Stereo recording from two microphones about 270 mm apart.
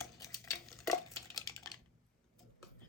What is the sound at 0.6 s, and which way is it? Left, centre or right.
Stir, centre.